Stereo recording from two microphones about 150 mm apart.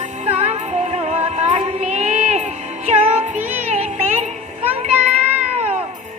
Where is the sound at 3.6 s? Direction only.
45° right (ahead or behind).